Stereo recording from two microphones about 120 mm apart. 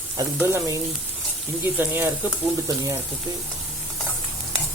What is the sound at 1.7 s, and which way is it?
Frying, 15° right (ahead or behind).